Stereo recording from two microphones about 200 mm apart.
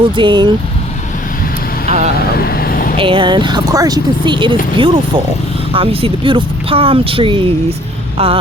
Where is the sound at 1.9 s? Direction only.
35° right (ahead or behind).